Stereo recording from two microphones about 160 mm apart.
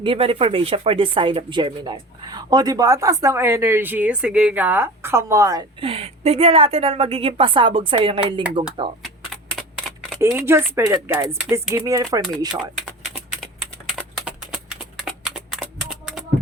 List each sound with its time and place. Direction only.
0.0 s speech: 35° right (ahead or behind)
5.8 s a woman's voice: 35° right (ahead or behind)
9.0 s a sound: 5° left (ahead or behind)
10.2 s speech: 15° right (ahead or behind)
13.4 s typing: centre (ahead or behind)